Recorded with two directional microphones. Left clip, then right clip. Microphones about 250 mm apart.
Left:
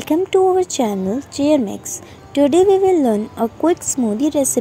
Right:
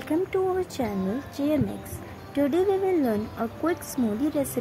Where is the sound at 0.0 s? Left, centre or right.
Left.